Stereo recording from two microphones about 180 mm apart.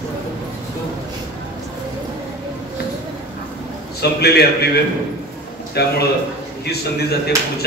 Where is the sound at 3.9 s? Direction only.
65° left (ahead or behind).